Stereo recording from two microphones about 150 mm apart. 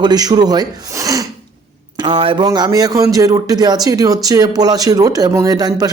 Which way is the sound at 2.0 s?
35° right (ahead or behind).